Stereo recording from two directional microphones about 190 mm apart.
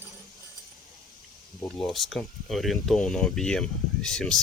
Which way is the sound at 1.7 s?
Centre (ahead or behind).